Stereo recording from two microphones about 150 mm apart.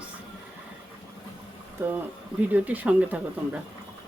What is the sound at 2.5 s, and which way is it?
Speech, 10° right (ahead or behind).